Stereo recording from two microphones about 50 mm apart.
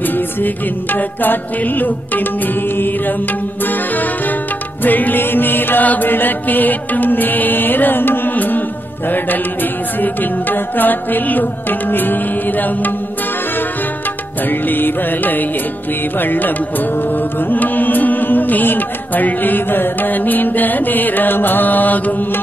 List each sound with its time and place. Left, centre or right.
0.0 s music: left
14.5 s music: left